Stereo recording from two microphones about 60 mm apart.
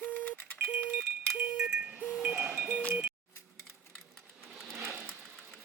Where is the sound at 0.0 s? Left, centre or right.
Left.